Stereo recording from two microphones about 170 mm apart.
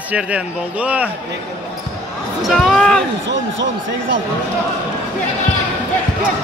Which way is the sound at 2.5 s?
Centre (ahead or behind).